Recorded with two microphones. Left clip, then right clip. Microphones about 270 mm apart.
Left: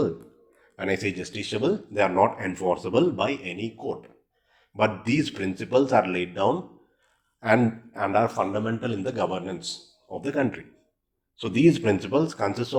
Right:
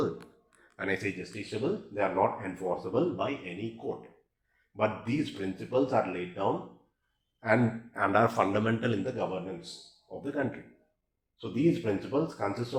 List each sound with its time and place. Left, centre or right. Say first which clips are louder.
0.8 s speech: left 5 dB; left
4.8 s speech: left 6 dB; left
7.3 s speech: left 5 dB; left
7.9 s a man's voice: left 2 dB; centre
9.0 s a man's voice: left 6 dB; left
11.3 s speech: left 8 dB; left